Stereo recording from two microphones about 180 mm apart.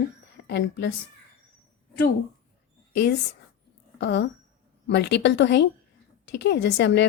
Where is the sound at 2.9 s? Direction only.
70° left (ahead or behind).